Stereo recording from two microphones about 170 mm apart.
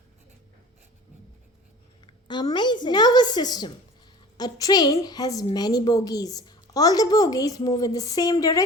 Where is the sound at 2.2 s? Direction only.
25° left (ahead or behind).